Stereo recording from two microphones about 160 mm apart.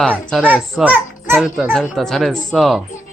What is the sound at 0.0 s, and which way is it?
Speech, 5° left (ahead or behind).